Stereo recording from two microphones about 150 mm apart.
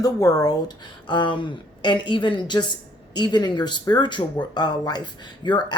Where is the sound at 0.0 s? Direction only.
25° left (ahead or behind).